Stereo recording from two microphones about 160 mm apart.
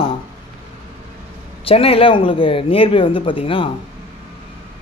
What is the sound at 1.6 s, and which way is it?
Speech, 35° left (ahead or behind).